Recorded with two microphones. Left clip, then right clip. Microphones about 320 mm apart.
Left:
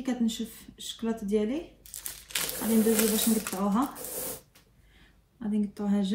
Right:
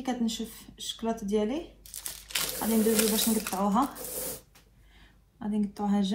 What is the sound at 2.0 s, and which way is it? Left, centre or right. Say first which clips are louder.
Crumpling: right 1 dB; centre.